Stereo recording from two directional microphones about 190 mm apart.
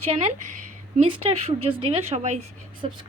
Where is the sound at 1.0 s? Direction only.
25° right (ahead or behind).